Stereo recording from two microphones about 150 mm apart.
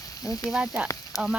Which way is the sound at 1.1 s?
20° left (ahead or behind).